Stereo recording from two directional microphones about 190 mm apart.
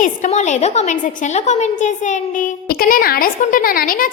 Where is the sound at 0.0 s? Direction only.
40° left (ahead or behind).